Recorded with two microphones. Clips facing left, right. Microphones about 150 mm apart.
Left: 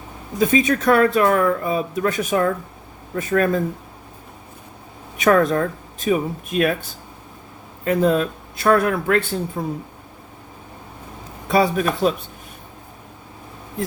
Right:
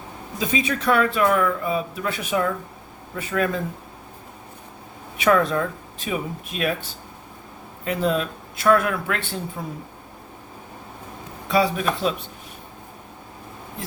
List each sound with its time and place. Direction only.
0.3 s speech: 50° left (ahead or behind)
5.1 s speech: 45° left (ahead or behind)
7.9 s speech: 45° left (ahead or behind)
11.4 s speech: 45° left (ahead or behind)